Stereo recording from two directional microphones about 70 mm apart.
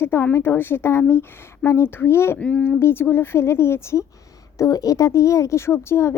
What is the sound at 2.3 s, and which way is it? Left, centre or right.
Speech, centre.